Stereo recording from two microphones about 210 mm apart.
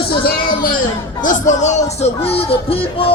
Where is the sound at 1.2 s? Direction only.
35° left (ahead or behind).